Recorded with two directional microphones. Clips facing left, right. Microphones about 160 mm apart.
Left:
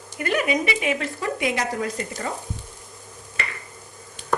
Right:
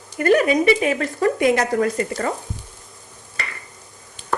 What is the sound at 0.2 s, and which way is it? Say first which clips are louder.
Speech: right 7 dB; 45° right (ahead or behind).